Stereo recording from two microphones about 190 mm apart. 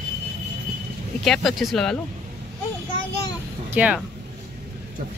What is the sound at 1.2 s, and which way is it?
Speech, centre (ahead or behind).